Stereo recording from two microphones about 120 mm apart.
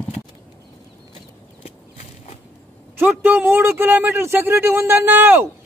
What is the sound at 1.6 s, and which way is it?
Horse, 60° left (ahead or behind).